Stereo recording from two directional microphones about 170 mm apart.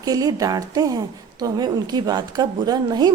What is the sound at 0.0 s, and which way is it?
A woman's voice, 20° right (ahead or behind).